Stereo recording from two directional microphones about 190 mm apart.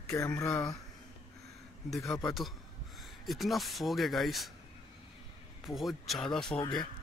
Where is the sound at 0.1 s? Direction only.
15° left (ahead or behind).